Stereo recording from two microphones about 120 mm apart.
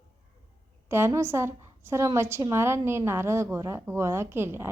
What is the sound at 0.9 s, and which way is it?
A woman's voice, 20° right (ahead or behind).